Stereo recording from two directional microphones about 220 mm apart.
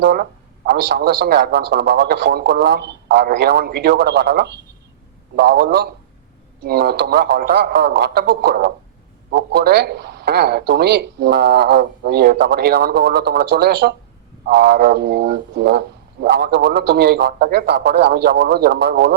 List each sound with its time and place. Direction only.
0.0 s a man's voice: 45° right (ahead or behind)